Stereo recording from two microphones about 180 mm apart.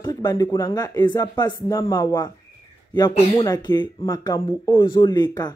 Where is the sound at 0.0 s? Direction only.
20° left (ahead or behind).